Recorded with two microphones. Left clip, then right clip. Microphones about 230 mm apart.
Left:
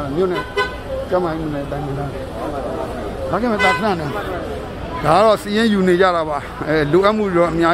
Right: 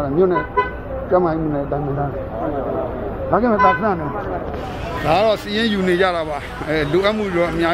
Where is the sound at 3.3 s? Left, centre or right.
Centre.